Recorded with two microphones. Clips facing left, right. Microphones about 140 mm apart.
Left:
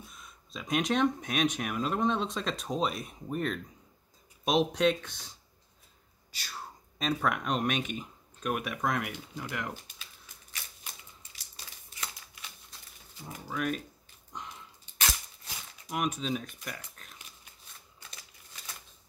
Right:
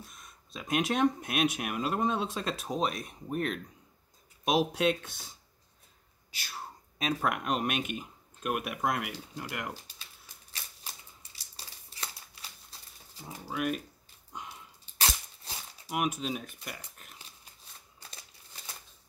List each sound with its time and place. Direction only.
0.1 s speech: centre (ahead or behind)
6.3 s a sound: 5° right (ahead or behind)
7.2 s speech: 5° right (ahead or behind)
9.8 s typewriter: 35° right (ahead or behind)
11.5 s crumpling: 30° right (ahead or behind)
13.5 s speech: 5° right (ahead or behind)
15.0 s a sound: 30° right (ahead or behind)
15.9 s speech: 5° right (ahead or behind)